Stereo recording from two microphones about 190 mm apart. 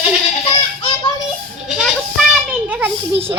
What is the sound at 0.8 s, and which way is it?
Music, 30° left (ahead or behind).